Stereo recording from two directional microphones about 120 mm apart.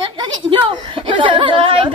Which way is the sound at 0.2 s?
45° right (ahead or behind).